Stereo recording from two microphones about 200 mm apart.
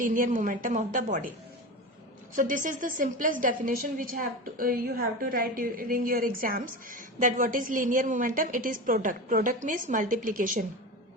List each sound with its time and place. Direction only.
0.0 s a woman's voice: 40° right (ahead or behind)
2.3 s a woman's voice: 40° right (ahead or behind)